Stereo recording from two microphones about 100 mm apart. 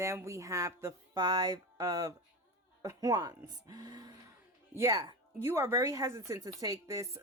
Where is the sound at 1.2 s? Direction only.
45° right (ahead or behind).